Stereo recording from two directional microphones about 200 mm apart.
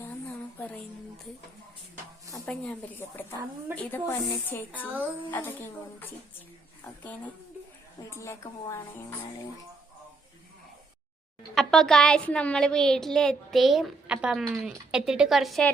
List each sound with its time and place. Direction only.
2.5 s speech: 5° left (ahead or behind)
11.5 s a woman's voice: centre (ahead or behind)